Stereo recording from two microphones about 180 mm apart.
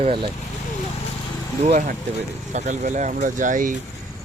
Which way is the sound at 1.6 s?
40° right (ahead or behind).